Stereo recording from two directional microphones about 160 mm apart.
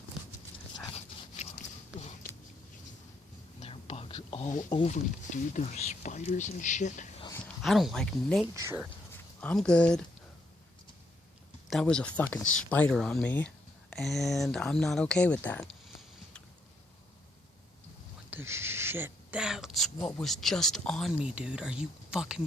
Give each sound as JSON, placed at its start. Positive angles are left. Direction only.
{"t": 0.9, "sound": "a sound", "side_deg": 45}
{"t": 3.6, "sound": "whispering", "side_deg": 35}
{"t": 4.9, "sound": "speech", "side_deg": 50}
{"t": 7.4, "sound": "speech", "side_deg": 0}
{"t": 8.5, "sound": "speech", "side_deg": -20}
{"t": 9.4, "sound": "speech", "side_deg": 10}
{"t": 11.7, "sound": "speech", "side_deg": 5}
{"t": 18.3, "sound": "speech", "side_deg": -15}